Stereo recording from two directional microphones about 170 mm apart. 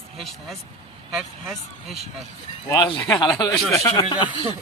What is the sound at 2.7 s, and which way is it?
Speech, 25° left (ahead or behind).